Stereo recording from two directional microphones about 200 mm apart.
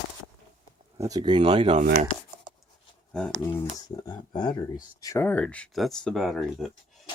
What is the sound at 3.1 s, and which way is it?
Speech, 5° left (ahead or behind).